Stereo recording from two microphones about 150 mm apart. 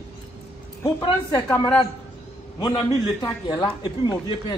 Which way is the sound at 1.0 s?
25° left (ahead or behind).